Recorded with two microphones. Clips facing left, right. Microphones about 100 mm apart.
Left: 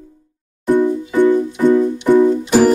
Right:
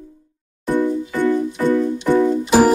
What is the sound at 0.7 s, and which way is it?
Music, 15° left (ahead or behind).